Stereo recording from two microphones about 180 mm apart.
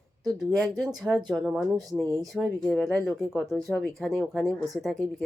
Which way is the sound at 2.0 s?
20° right (ahead or behind).